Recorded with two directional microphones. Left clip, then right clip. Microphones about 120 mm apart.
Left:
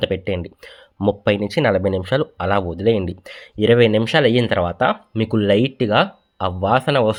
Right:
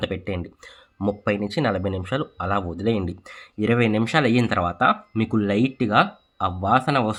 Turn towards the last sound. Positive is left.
turn(degrees=25)  # may be behind; listen again after turning